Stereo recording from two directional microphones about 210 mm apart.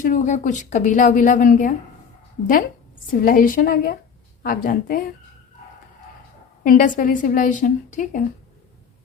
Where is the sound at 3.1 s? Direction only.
40° left (ahead or behind).